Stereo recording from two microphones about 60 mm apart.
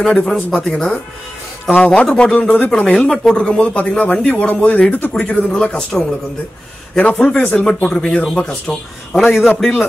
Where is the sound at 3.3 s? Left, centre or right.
Centre.